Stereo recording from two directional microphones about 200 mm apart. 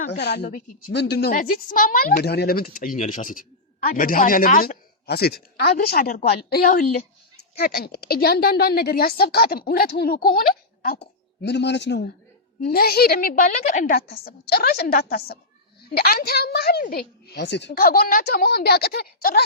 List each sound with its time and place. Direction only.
0.2 s a man's voice: 55° left (ahead or behind)
11.4 s a man's voice: 60° left (ahead or behind)